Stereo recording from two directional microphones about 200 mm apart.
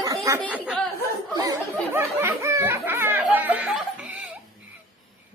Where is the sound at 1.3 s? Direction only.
15° right (ahead or behind).